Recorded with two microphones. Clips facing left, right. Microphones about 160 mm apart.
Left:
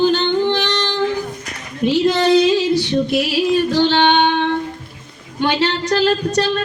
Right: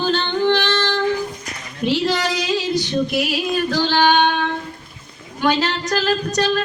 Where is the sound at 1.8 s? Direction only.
25° left (ahead or behind).